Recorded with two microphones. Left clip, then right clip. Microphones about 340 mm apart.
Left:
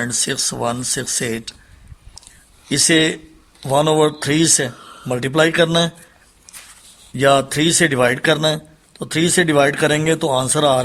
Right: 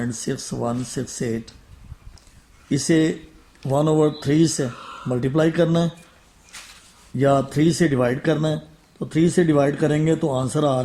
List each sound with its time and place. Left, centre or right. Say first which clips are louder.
0.0 s speech: left 7 dB; left
2.6 s speech: left 5 dB; left
7.2 s speech: left 4 dB; left